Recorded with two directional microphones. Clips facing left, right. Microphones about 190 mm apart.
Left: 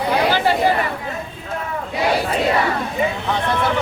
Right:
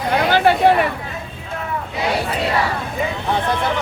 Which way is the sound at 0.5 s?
65° right (ahead or behind).